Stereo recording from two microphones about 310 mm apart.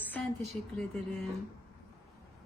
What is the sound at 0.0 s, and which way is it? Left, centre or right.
Speech, centre.